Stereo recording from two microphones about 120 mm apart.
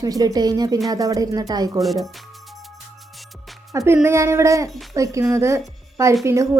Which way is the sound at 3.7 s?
20° right (ahead or behind).